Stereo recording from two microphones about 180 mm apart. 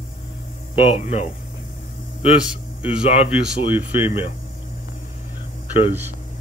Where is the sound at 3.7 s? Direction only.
10° right (ahead or behind).